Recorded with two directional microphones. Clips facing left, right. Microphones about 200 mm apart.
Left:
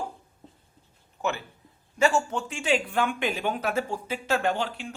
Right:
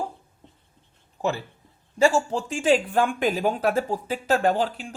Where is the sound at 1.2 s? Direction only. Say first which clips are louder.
Right 3 dB; 35° right (ahead or behind).